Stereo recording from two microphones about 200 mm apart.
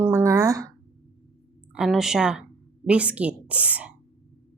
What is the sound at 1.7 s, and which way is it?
Speech, 5° right (ahead or behind).